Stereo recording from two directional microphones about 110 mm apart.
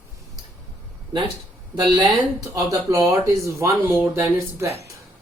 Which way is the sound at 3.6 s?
20° right (ahead or behind).